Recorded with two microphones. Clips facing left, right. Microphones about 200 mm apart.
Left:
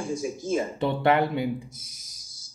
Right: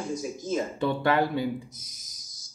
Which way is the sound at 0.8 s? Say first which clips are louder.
Left 2 dB; 20° left (ahead or behind).